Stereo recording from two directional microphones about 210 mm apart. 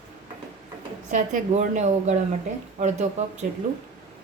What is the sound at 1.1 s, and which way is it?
Speech, 35° right (ahead or behind).